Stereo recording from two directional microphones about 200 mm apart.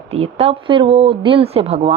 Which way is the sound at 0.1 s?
30° right (ahead or behind).